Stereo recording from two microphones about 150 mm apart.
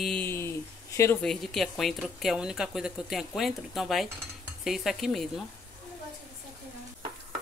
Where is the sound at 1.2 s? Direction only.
5° left (ahead or behind).